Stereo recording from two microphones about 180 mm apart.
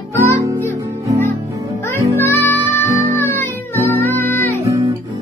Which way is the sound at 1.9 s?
15° left (ahead or behind).